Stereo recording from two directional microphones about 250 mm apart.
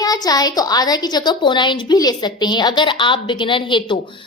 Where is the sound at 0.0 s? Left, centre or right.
Centre.